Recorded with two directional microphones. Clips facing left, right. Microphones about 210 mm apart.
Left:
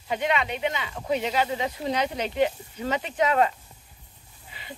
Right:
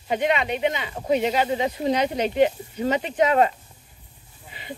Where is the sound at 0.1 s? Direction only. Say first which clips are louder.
Right 4 dB; 20° right (ahead or behind).